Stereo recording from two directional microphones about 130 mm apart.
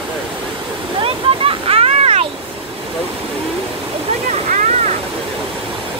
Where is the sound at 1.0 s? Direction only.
45° right (ahead or behind).